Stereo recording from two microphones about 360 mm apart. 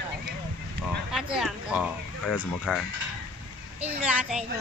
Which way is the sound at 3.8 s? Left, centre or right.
Centre.